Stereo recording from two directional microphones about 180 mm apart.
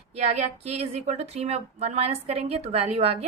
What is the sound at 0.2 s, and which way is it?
A woman's voice, 40° right (ahead or behind).